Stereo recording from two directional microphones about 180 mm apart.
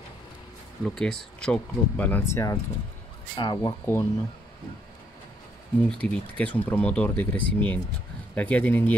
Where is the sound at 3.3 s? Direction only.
25° left (ahead or behind).